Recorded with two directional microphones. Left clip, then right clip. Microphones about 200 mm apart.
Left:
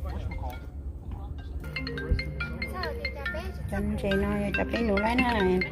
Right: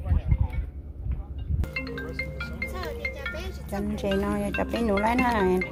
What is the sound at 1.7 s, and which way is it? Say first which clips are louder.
Speech: right 1 dB; 35° left (ahead or behind).